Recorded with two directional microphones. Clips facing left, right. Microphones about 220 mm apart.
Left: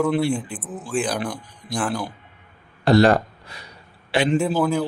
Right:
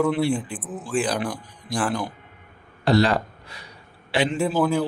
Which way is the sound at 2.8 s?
50° left (ahead or behind).